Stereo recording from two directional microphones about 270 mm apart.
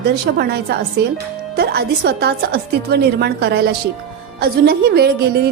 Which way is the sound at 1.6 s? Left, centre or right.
Right.